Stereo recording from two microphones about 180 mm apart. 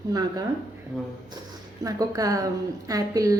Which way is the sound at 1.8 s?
20° right (ahead or behind).